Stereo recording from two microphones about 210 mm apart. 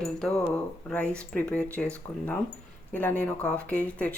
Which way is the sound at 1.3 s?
5° left (ahead or behind).